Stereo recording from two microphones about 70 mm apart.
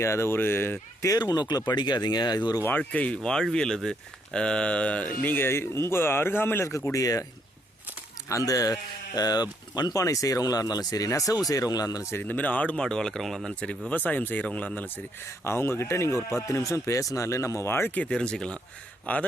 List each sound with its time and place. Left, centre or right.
0.0 s speech: left
1.0 s speech: left
2.6 s speech: left
3.2 s speech: centre; by 6.7 s left
6.7 s speech: left
8.3 s speech: left
9.9 s speech: left
12.2 s speech: left
18.0 s speech: centre